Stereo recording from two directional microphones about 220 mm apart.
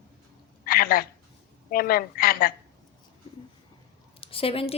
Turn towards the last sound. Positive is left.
turn(degrees=25)  # may be behind; listen again after turning